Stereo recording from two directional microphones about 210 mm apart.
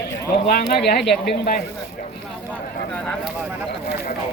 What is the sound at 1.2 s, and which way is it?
Speech, 40° left (ahead or behind).